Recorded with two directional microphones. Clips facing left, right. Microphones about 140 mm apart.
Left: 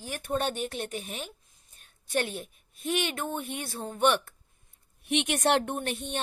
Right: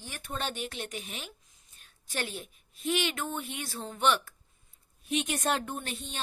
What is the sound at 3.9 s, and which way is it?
Speech, 55° left (ahead or behind).